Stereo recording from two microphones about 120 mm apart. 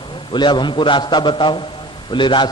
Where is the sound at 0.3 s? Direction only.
40° left (ahead or behind).